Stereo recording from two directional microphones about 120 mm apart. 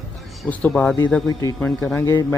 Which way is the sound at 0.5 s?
10° left (ahead or behind).